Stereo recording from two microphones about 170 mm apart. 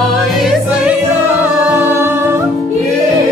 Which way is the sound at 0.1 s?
Centre (ahead or behind).